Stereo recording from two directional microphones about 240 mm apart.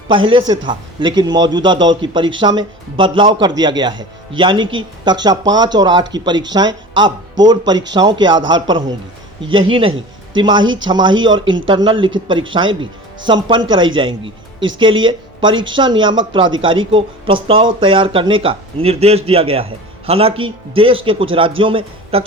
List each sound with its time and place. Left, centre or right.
0.1 s a man's voice: right